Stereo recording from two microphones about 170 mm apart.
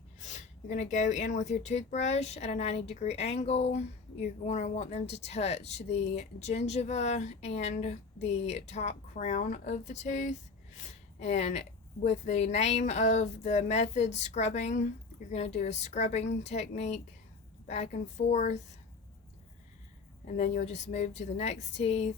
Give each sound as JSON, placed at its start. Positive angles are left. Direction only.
{"t": 0.2, "sound": "speech", "side_deg": 45}
{"t": 20.2, "sound": "speech", "side_deg": 45}